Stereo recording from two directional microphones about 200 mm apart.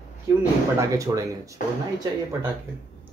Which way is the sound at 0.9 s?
15° right (ahead or behind).